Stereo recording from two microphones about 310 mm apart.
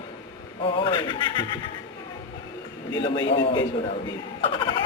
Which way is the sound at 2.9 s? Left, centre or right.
Centre.